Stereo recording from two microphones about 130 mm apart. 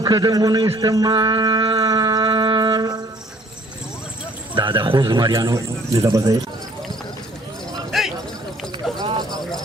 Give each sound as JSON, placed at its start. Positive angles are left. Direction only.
{"t": 0.0, "sound": "a man's voice", "side_deg": -30}
{"t": 4.5, "sound": "a man's voice", "side_deg": -35}
{"t": 7.9, "sound": "a sound", "side_deg": 0}
{"t": 9.0, "sound": "clip-clop", "side_deg": -30}